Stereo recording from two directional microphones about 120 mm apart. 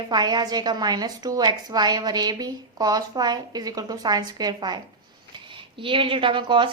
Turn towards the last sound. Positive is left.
turn(degrees=-45)  # may be behind; listen again after turning